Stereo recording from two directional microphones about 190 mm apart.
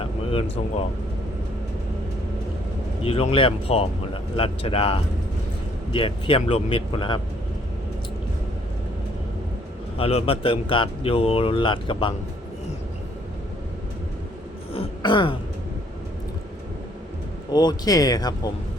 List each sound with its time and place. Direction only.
0.0 s a sound: 30° left (ahead or behind)
3.0 s speech: 30° left (ahead or behind)
10.0 s speech: 30° left (ahead or behind)
14.7 s throat clearing: 25° left (ahead or behind)
17.5 s speech: 20° left (ahead or behind)